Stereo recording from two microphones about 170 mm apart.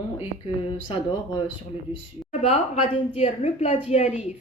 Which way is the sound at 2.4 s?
40° left (ahead or behind).